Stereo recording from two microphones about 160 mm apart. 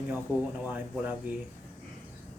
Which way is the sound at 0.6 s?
10° right (ahead or behind).